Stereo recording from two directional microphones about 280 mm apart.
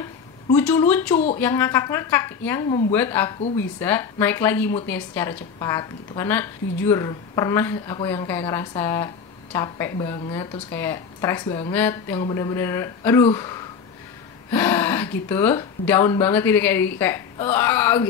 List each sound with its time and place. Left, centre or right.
0.6 s a woman's voice: centre